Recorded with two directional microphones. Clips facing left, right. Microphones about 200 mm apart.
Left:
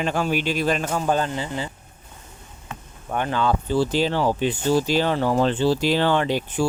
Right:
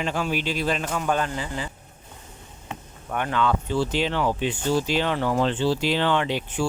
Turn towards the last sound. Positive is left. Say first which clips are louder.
# left 3 dB
turn(degrees=40)  # may be behind; listen again after turning